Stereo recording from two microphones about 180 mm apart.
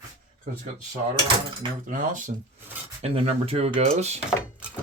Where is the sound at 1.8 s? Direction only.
45° right (ahead or behind).